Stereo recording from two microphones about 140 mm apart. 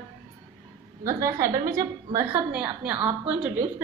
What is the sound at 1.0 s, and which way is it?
A woman's voice, 20° right (ahead or behind).